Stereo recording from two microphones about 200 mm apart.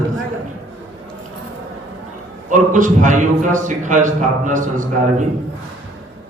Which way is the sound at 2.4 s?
40° right (ahead or behind).